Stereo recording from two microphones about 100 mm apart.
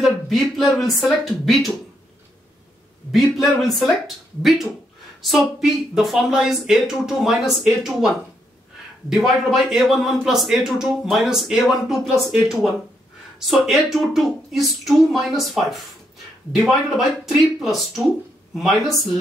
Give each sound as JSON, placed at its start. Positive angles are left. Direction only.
{"t": 0.0, "sound": "a man's voice", "side_deg": 0}
{"t": 3.1, "sound": "a man's voice", "side_deg": 0}